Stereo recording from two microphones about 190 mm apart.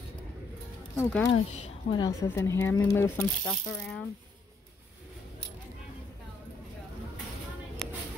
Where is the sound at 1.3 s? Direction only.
30° left (ahead or behind).